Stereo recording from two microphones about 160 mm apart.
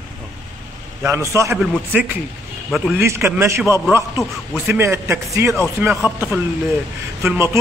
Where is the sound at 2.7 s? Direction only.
Centre (ahead or behind).